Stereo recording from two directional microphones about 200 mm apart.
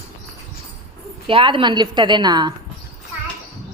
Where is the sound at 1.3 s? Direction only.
25° right (ahead or behind).